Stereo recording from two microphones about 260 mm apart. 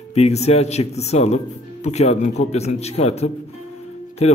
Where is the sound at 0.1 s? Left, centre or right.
Left.